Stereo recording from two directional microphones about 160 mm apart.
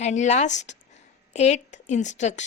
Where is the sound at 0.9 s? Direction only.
45° left (ahead or behind).